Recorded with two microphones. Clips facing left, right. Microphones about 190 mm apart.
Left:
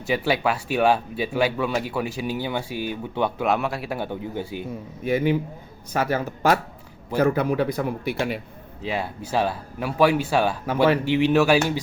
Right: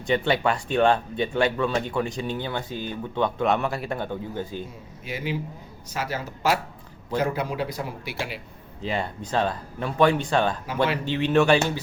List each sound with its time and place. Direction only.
0.0 s speech: 5° left (ahead or behind)
5.0 s a man's voice: 55° left (ahead or behind)
8.8 s speech: 5° left (ahead or behind)